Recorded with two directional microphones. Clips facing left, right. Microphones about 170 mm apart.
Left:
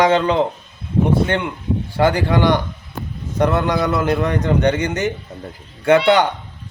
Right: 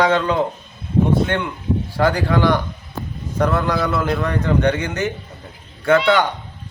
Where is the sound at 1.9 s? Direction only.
15° left (ahead or behind).